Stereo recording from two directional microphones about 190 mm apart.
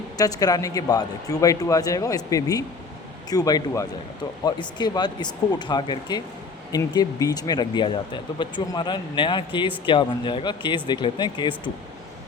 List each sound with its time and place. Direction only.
0.2 s speech: 20° left (ahead or behind)